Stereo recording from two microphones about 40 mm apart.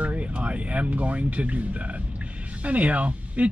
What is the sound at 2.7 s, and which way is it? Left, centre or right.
Speech, right.